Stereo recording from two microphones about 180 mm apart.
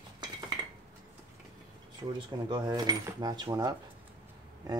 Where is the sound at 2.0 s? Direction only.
20° right (ahead or behind).